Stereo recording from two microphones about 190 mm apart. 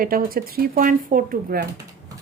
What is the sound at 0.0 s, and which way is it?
Speech, 50° right (ahead or behind).